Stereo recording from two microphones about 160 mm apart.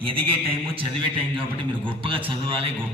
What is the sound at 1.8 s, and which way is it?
Speech, 35° right (ahead or behind).